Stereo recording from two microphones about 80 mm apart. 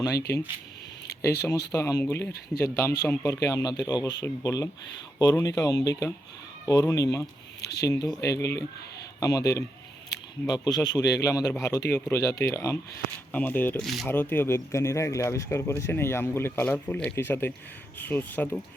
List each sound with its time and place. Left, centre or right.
0.0 s speech: left
3.4 s speech: left
13.3 s speech: left
13.7 s speech: centre
14.1 s speech: left